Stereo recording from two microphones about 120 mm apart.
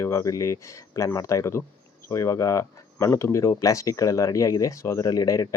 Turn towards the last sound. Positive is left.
turn(degrees=30)  # may be behind; listen again after turning